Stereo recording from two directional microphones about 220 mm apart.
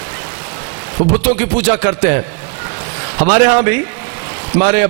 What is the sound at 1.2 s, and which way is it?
Music, 10° right (ahead or behind).